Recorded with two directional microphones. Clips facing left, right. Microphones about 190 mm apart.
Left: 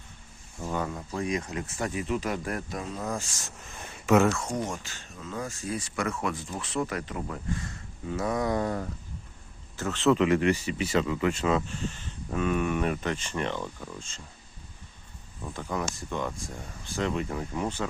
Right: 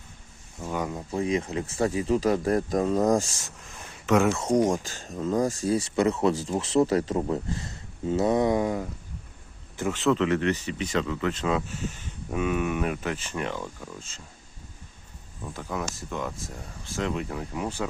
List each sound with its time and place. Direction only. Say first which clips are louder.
0.6 s speech: right 1 dB; 10° right (ahead or behind); by 3.2 s 45° right (ahead or behind)
3.4 s speech: left 1 dB; 5° left (ahead or behind)
4.7 s a man's voice: right 9 dB; 40° right (ahead or behind); by 10.0 s 15° right (ahead or behind)
10.0 s speech: left 1 dB; 5° left (ahead or behind)
15.4 s speech: even; centre (ahead or behind)